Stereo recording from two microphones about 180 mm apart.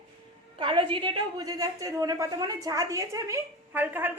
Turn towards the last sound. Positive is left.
turn(degrees=-10)  # may be behind; listen again after turning